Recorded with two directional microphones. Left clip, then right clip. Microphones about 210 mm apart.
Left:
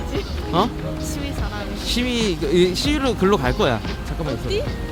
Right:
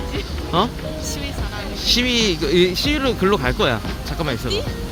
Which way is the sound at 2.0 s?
Centre (ahead or behind).